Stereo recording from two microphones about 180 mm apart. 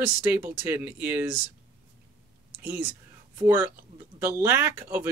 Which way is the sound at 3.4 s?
10° right (ahead or behind).